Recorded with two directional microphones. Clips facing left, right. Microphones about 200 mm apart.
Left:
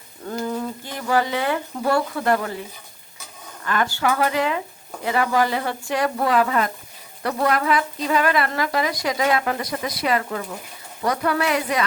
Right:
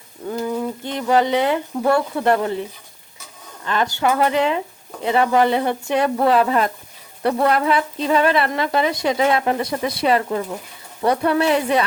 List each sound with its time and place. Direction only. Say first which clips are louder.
0.3 s speech: right 3 dB; 15° right (ahead or behind)
3.6 s speech: right 2 dB; 20° right (ahead or behind)